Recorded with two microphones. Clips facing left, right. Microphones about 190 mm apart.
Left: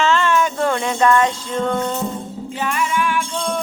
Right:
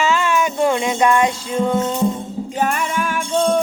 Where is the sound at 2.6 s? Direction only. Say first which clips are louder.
Right 1 dB; 45° right (ahead or behind).